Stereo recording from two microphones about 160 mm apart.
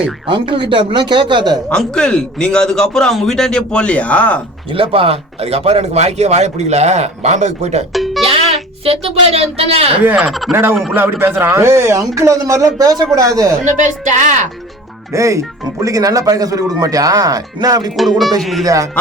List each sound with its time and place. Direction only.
0.3 s speech: 30° right (ahead or behind)
1.7 s a man's voice: 5° left (ahead or behind)
4.7 s speech: 35° right (ahead or behind)
7.9 s music: centre (ahead or behind)
8.3 s speech: 35° right (ahead or behind)
10.0 s a man's voice: 10° right (ahead or behind)
10.5 s a man's voice: 15° right (ahead or behind)
13.7 s speech: 50° right (ahead or behind)
15.1 s speech: 20° right (ahead or behind)
17.9 s a man's voice: centre (ahead or behind)
18.6 s speech: 20° right (ahead or behind)